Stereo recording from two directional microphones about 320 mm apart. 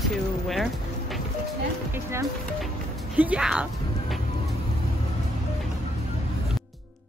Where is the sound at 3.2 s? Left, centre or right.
Centre.